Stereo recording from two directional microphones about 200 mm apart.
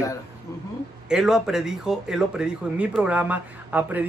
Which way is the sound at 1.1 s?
5° right (ahead or behind).